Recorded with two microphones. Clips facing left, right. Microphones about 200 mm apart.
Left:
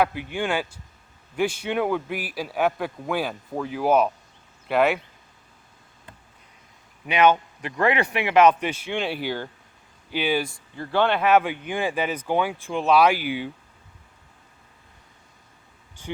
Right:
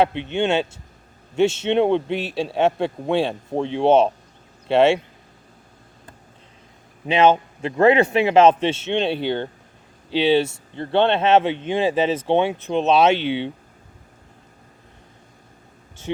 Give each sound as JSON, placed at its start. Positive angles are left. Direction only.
{"t": 0.0, "sound": "speech", "side_deg": -25}
{"t": 7.0, "sound": "speech", "side_deg": -25}
{"t": 16.1, "sound": "speech", "side_deg": -25}